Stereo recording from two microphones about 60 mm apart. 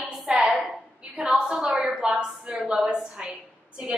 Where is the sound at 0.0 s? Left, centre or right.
Centre.